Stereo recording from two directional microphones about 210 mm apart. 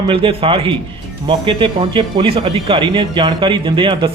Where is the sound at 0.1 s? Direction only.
25° right (ahead or behind).